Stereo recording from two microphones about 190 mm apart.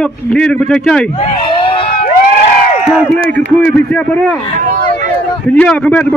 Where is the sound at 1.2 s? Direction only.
25° left (ahead or behind).